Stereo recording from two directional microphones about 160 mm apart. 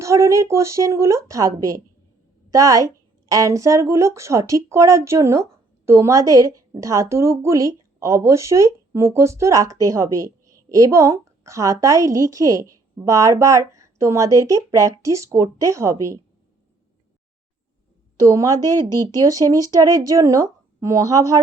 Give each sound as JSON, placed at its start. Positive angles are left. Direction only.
{"t": 0.0, "sound": "a woman's voice", "side_deg": -20}
{"t": 18.2, "sound": "a woman's voice", "side_deg": -20}